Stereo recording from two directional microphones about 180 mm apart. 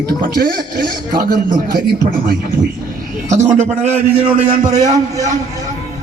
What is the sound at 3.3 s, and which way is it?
A man's voice, 40° right (ahead or behind).